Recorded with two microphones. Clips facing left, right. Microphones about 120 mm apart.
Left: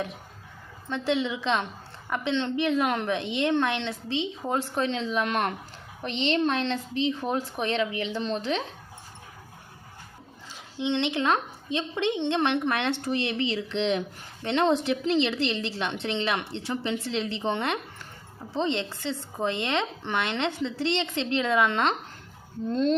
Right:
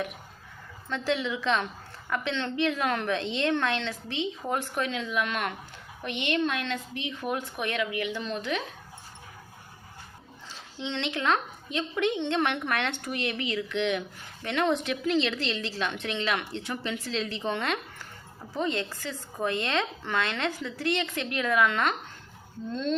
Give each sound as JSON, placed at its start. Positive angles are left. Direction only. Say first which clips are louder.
{"t": 0.9, "sound": "a woman's voice", "louder": "left 2 dB", "side_deg": 20}
{"t": 10.8, "sound": "a woman's voice", "louder": "left 6 dB", "side_deg": 20}
{"t": 22.7, "sound": "speech", "louder": "left 5 dB", "side_deg": 40}